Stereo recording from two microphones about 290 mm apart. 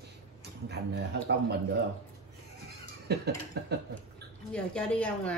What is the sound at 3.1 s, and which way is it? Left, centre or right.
Speech, right.